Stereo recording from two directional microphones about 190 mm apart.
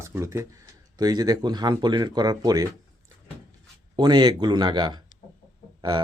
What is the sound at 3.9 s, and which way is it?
Speech, 20° right (ahead or behind).